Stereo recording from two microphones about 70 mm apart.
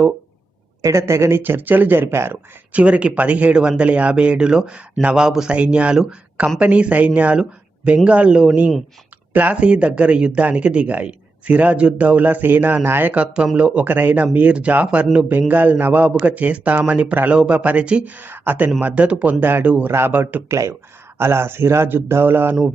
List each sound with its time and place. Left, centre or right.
0.8 s speech: right
1.4 s speech: right
2.7 s speech: centre
20.5 s speech: right